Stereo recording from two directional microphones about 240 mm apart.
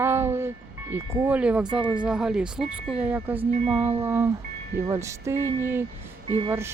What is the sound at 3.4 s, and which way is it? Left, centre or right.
Speech, right.